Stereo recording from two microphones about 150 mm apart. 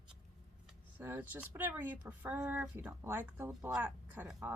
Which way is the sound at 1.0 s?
15° right (ahead or behind).